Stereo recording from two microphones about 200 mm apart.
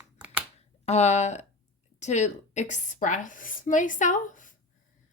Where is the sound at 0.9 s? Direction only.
35° left (ahead or behind).